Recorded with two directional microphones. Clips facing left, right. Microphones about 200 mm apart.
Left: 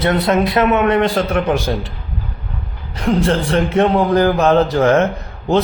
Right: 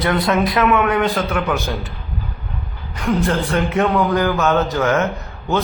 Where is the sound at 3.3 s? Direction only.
30° left (ahead or behind).